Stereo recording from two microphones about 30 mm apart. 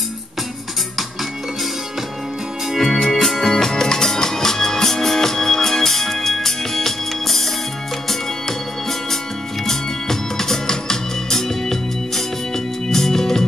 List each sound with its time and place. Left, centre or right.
2.8 s music: centre
9.7 s music: centre